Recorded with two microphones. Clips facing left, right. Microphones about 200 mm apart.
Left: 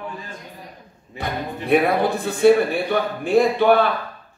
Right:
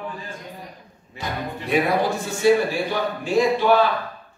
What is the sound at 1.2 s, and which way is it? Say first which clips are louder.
A man's voice: left 2 dB; 55° left (ahead or behind).